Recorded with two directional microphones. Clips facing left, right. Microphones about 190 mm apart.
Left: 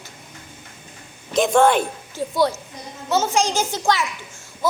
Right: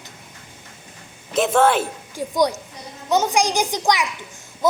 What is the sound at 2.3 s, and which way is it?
A woman's voice, 15° right (ahead or behind).